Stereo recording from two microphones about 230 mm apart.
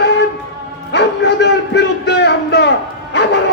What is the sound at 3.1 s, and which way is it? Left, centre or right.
Music, left.